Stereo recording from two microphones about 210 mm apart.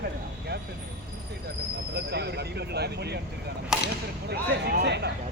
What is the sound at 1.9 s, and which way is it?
Speech, 50° right (ahead or behind).